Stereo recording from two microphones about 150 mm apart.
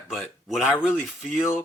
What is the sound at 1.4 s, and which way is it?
Speech, 15° left (ahead or behind).